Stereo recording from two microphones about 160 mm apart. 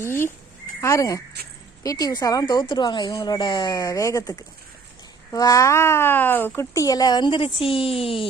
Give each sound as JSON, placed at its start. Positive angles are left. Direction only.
{"t": 0.0, "sound": "speech", "side_deg": 15}